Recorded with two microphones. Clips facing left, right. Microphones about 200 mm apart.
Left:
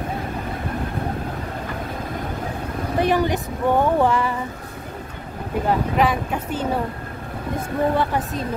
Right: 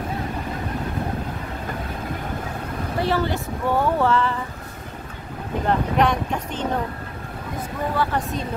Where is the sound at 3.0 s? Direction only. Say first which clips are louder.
Left 3 dB; 15° left (ahead or behind).